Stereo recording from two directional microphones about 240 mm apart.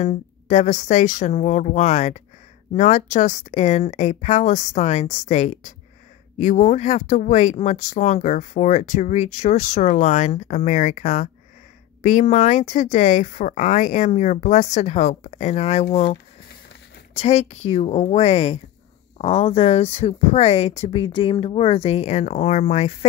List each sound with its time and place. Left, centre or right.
0.0 s speech: left